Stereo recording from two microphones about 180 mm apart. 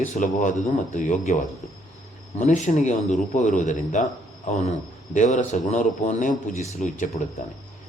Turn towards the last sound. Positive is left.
turn(degrees=40)  # may be behind; listen again after turning